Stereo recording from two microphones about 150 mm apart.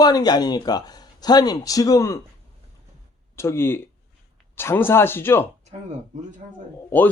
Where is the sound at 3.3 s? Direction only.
15° left (ahead or behind).